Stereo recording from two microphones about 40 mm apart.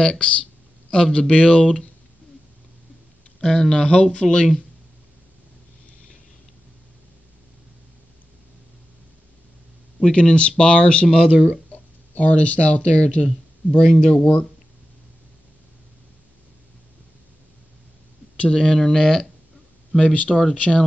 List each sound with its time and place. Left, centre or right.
0.0 s speech: left
3.3 s speech: centre
9.9 s speech: left
11.7 s speech: left
18.5 s speech: left
20.0 s speech: left